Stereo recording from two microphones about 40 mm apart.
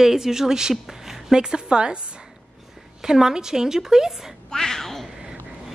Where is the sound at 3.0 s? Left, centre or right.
Centre.